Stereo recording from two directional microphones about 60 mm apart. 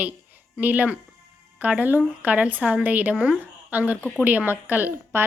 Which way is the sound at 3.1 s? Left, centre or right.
Centre.